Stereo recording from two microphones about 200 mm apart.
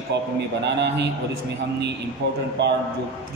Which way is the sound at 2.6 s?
60° right (ahead or behind).